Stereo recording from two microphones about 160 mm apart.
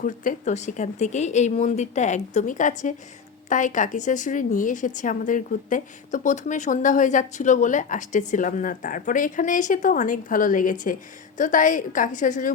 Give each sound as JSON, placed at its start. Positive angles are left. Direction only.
{"t": 0.0, "sound": "a woman's voice", "side_deg": 50}